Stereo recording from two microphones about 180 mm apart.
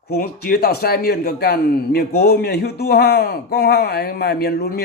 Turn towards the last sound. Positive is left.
turn(degrees=60)  # may be behind; listen again after turning